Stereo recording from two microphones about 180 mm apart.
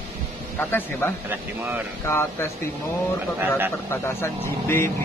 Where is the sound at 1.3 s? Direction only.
10° right (ahead or behind).